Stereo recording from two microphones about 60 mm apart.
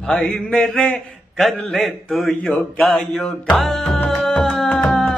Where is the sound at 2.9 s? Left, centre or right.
Centre.